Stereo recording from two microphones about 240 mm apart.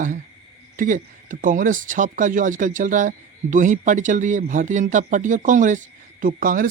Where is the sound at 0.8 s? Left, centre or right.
Right.